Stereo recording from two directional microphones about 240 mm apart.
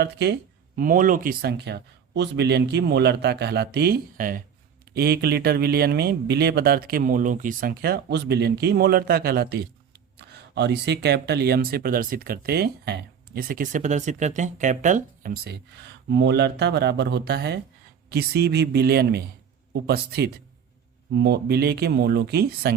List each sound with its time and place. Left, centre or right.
0.0 s speech: right